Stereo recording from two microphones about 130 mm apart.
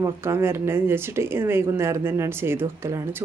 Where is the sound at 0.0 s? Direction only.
20° right (ahead or behind).